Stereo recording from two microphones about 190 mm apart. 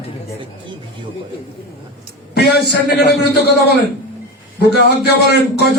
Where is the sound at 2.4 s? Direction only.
60° left (ahead or behind).